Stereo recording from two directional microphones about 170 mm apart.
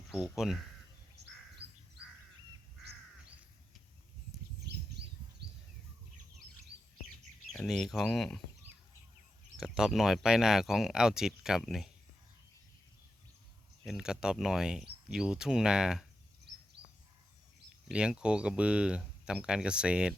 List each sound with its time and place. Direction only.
0.1 s speech: 5° right (ahead or behind)
1.6 s crow: 35° right (ahead or behind)
4.6 s a sound: 75° right (ahead or behind)
7.5 s speech: 5° left (ahead or behind)
9.6 s speech: centre (ahead or behind)
13.8 s speech: 5° right (ahead or behind)
17.8 s speech: 5° right (ahead or behind)